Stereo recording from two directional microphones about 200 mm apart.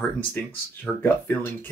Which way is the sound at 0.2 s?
10° left (ahead or behind).